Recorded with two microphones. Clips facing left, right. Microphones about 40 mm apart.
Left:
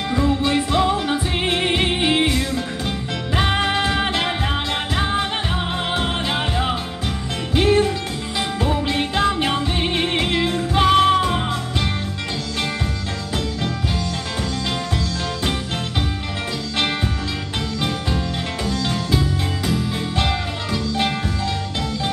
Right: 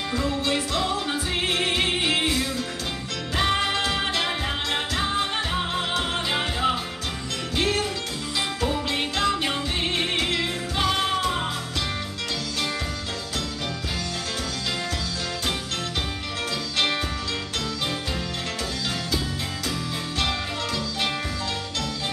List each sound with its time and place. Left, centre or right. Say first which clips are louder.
0.1 s music: left 7 dB; left
7.5 s music: left 8 dB; left
18.7 s music: left 9 dB; centre